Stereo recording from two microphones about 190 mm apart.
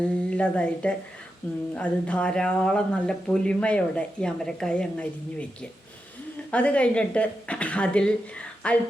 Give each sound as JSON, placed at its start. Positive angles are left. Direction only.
{"t": 0.3, "sound": "a woman's voice", "side_deg": 5}
{"t": 6.5, "sound": "a woman's voice", "side_deg": 5}